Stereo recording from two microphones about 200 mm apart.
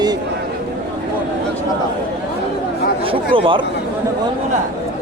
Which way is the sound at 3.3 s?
25° right (ahead or behind).